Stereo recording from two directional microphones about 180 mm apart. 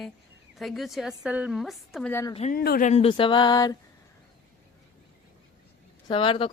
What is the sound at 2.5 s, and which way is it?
Speech, 55° left (ahead or behind).